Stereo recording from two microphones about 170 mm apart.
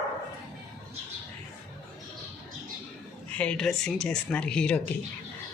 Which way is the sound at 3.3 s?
5° left (ahead or behind).